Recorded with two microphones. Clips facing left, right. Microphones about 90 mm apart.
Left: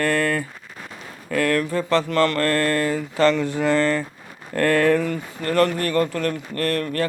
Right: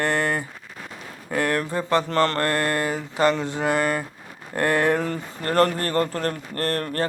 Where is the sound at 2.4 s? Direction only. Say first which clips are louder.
Left 2 dB; 20° right (ahead or behind).